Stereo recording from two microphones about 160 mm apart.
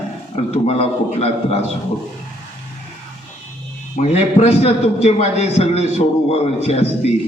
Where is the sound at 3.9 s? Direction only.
45° left (ahead or behind).